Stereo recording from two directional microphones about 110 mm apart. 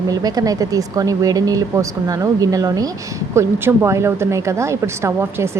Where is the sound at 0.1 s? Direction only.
35° right (ahead or behind).